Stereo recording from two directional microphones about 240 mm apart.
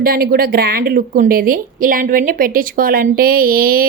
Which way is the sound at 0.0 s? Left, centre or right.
Right.